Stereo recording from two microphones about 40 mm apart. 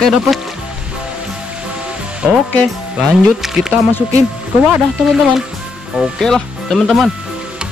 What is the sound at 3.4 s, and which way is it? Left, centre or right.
Speech, centre.